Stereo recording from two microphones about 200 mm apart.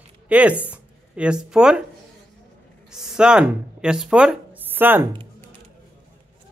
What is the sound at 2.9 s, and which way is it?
Speech, 5° right (ahead or behind).